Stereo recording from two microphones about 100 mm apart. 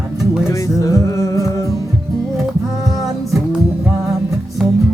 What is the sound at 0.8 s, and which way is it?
Music, 30° left (ahead or behind).